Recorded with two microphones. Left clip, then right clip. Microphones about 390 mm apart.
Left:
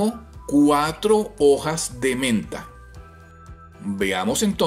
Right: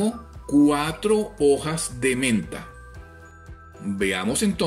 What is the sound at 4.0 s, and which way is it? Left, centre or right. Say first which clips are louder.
Speech: left 2 dB; centre.